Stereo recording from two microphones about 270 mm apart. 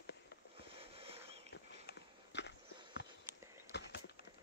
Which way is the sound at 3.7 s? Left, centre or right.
Left.